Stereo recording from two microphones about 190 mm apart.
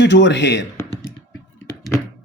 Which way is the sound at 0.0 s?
65° left (ahead or behind).